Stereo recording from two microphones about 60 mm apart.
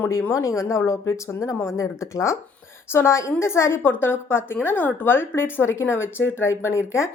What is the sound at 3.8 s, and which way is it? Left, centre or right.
A woman's voice, left.